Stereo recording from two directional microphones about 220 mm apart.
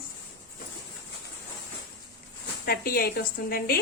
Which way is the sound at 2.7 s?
45° left (ahead or behind).